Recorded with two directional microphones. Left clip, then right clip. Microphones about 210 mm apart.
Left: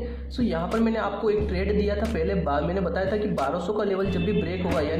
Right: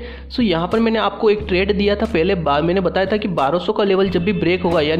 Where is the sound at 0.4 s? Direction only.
30° right (ahead or behind).